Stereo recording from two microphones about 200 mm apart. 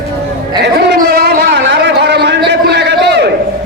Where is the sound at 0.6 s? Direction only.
55° right (ahead or behind).